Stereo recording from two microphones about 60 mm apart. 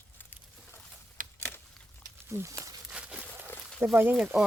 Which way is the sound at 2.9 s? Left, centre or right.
Centre.